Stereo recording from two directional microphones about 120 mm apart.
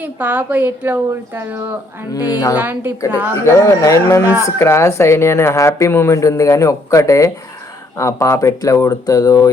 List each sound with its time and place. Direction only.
0.0 s a woman's voice: 15° right (ahead or behind)
2.1 s a woman's voice: 30° left (ahead or behind)
2.6 s a woman's voice: 15° right (ahead or behind)
3.3 s a woman's voice: 25° left (ahead or behind)